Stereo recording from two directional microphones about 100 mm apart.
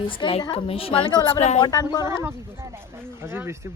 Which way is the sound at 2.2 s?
25° right (ahead or behind).